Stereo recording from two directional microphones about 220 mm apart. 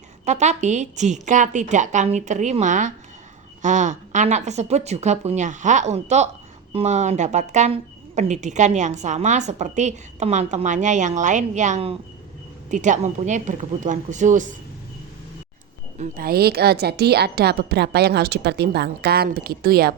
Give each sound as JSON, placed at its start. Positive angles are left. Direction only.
{"t": 0.3, "sound": "speech", "side_deg": -30}
{"t": 16.0, "sound": "a woman's voice", "side_deg": -40}